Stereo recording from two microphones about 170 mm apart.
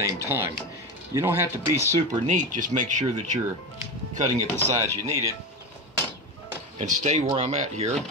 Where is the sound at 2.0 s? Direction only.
45° right (ahead or behind).